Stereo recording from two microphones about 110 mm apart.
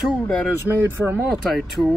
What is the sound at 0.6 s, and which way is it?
Speech, 20° right (ahead or behind).